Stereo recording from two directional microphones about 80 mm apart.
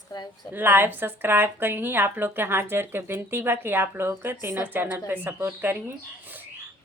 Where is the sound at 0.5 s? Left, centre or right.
Right.